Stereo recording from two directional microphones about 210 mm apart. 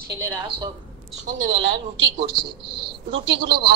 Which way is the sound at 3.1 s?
55° right (ahead or behind).